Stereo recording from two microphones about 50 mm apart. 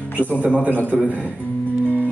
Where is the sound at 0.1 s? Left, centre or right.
Left.